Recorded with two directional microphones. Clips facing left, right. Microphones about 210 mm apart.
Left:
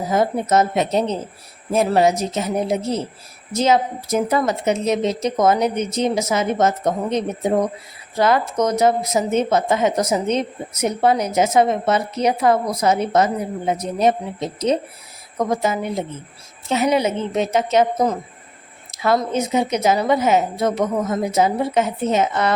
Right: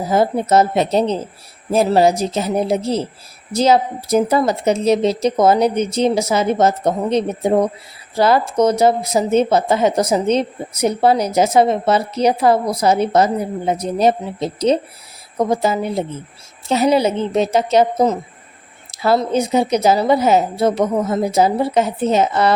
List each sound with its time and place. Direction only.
0.1 s speech: 30° right (ahead or behind)